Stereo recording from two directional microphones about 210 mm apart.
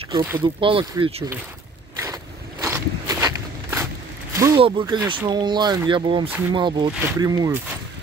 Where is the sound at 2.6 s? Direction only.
10° right (ahead or behind).